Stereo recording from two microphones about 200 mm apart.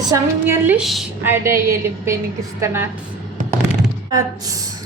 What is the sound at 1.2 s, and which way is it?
Speech, 10° right (ahead or behind).